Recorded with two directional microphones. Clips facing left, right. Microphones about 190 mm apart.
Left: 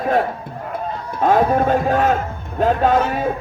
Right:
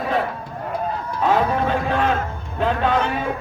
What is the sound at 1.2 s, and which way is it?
Music, 45° left (ahead or behind).